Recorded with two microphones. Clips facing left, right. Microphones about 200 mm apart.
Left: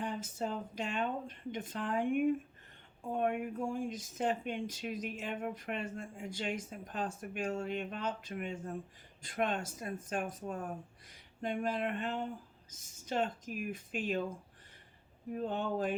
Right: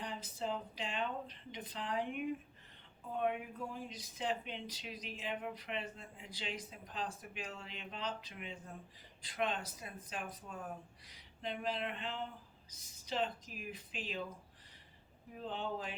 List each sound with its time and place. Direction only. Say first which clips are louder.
0.0 s speech: left 4 dB; 50° left (ahead or behind)
15.4 s speech: left 6 dB; 50° left (ahead or behind)